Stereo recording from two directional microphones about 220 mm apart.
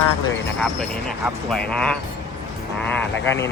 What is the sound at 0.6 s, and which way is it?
Speech, centre (ahead or behind).